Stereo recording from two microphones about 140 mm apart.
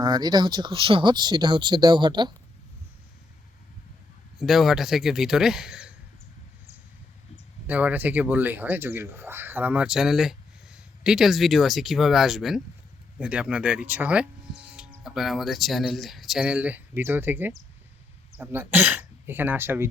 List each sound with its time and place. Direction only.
0.0 s speech: 30° right (ahead or behind)
4.4 s speech: centre (ahead or behind)
7.7 s speech: 10° right (ahead or behind)